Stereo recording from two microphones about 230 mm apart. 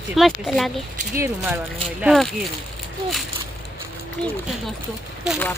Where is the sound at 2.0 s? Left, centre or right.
Centre.